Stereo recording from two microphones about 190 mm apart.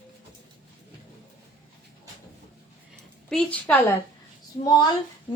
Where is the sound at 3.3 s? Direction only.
5° left (ahead or behind).